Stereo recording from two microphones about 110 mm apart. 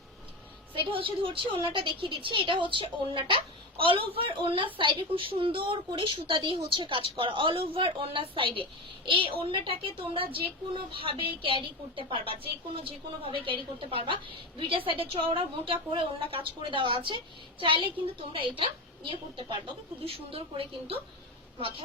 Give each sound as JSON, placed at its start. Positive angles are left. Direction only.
{"t": 0.9, "sound": "a woman's voice", "side_deg": -55}
{"t": 20.1, "sound": "a woman's voice", "side_deg": -60}